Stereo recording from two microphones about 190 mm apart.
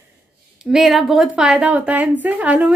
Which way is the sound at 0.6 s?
Centre (ahead or behind).